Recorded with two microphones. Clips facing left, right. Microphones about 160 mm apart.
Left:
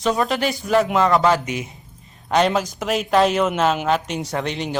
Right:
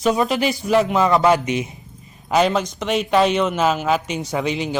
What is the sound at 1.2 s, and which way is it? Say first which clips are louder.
Speech: right 2 dB; 20° right (ahead or behind).